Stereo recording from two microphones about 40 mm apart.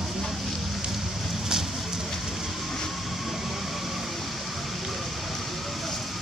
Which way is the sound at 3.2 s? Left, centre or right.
Centre.